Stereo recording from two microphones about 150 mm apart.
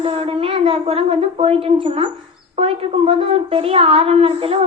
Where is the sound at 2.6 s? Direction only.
40° right (ahead or behind).